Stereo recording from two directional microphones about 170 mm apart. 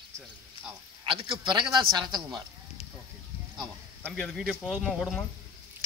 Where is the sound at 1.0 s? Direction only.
30° right (ahead or behind).